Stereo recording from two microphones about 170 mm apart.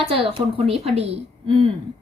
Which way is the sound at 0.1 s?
35° right (ahead or behind).